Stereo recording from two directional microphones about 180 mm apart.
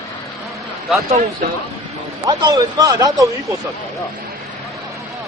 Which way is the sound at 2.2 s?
20° right (ahead or behind).